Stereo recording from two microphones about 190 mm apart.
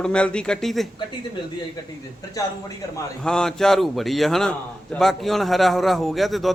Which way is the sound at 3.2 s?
5° left (ahead or behind).